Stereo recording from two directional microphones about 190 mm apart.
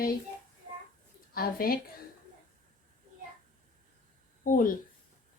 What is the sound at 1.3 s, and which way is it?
Speech, 50° left (ahead or behind).